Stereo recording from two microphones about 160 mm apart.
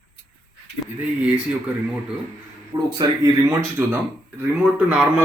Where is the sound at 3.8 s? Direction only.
15° right (ahead or behind).